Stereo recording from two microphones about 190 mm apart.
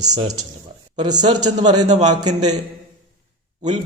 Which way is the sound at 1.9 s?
40° right (ahead or behind).